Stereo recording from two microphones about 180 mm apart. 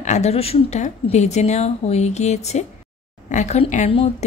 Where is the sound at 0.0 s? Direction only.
40° left (ahead or behind).